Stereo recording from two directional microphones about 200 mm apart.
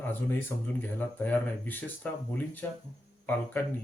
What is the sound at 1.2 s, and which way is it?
Speech, 10° left (ahead or behind).